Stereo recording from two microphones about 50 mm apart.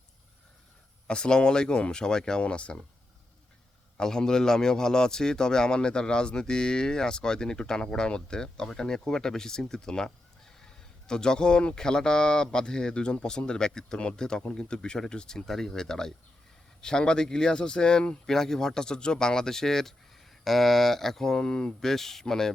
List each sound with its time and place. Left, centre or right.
1.0 s a man's voice: centre
3.9 s a man's voice: centre
11.1 s a man's voice: centre